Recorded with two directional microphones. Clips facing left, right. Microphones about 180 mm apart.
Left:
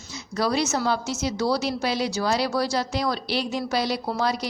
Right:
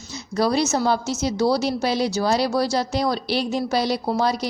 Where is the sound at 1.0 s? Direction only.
40° right (ahead or behind).